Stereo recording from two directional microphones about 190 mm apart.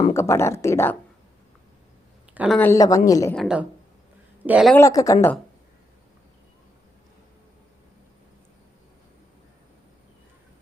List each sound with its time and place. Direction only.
0.1 s speech: 15° left (ahead or behind)
2.3 s speech: 5° right (ahead or behind)
2.6 s speech: 15° left (ahead or behind)
3.3 s a woman's voice: centre (ahead or behind)
4.7 s speech: 15° left (ahead or behind)